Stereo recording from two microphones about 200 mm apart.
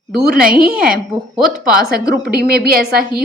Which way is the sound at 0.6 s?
45° right (ahead or behind).